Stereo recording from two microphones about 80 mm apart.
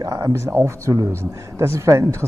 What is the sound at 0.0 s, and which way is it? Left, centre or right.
A man's voice, right.